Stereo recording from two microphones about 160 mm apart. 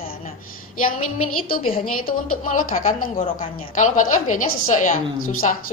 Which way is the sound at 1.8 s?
60° left (ahead or behind).